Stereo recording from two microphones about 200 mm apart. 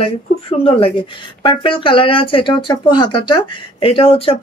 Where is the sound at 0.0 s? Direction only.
30° left (ahead or behind).